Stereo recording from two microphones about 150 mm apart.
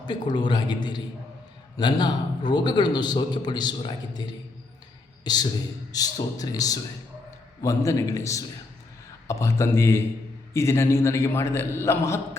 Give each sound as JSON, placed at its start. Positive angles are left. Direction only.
{"t": 0.0, "sound": "a man's voice", "side_deg": 30}
{"t": 5.2, "sound": "a man's voice", "side_deg": 25}